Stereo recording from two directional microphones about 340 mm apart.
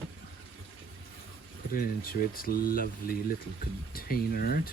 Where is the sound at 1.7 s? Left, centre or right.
Left.